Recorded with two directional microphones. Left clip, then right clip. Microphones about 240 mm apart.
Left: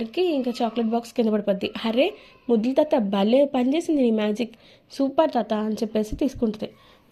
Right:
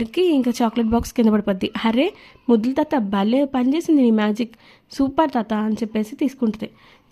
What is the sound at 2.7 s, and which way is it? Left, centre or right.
A woman's voice, centre.